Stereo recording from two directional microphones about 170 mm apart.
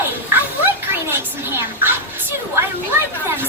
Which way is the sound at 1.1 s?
15° right (ahead or behind).